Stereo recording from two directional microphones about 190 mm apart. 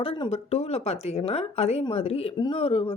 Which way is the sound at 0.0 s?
30° left (ahead or behind).